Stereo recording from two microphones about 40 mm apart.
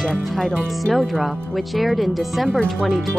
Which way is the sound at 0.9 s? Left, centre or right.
Centre.